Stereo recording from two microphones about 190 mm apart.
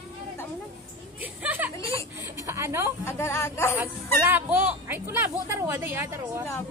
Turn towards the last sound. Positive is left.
turn(degrees=-10)  # may be behind; listen again after turning